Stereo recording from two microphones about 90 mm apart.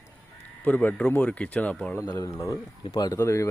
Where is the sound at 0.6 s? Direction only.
15° left (ahead or behind).